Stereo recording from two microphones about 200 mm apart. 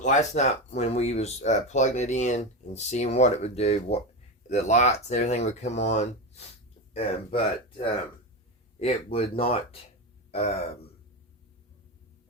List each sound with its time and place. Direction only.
0.0 s speech: 35° left (ahead or behind)